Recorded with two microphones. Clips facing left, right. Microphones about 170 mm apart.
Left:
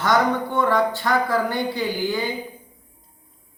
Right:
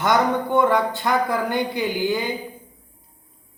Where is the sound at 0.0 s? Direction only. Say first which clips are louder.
Even; 20° right (ahead or behind).